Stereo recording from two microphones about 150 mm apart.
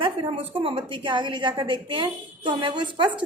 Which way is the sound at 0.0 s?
35° right (ahead or behind).